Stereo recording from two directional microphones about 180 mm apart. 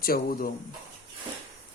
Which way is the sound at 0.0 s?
55° left (ahead or behind).